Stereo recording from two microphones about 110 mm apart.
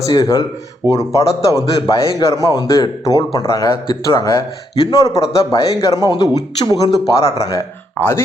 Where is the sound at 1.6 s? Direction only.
30° left (ahead or behind).